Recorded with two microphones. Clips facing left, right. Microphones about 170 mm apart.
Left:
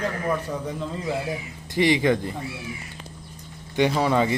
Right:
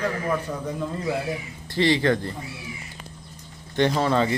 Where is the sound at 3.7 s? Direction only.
10° left (ahead or behind).